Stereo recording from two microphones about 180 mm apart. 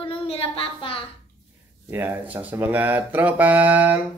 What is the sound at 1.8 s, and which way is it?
Speech, 10° right (ahead or behind).